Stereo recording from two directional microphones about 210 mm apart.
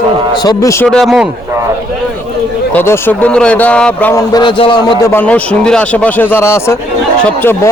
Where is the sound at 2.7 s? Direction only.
10° left (ahead or behind).